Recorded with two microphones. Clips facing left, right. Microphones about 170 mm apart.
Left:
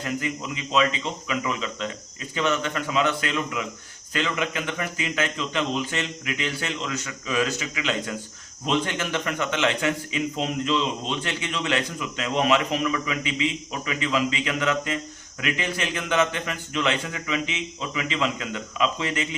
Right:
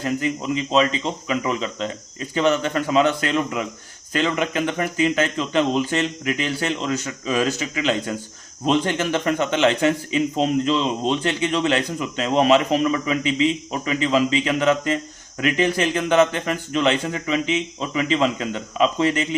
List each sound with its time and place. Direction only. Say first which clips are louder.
0.0 s speech: right 5 dB; 30° right (ahead or behind)